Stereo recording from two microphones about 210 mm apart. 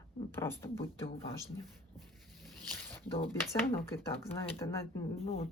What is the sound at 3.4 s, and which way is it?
A woman's voice, 10° left (ahead or behind).